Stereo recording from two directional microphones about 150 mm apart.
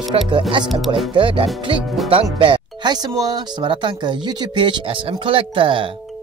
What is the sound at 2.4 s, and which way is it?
Speech, 35° right (ahead or behind).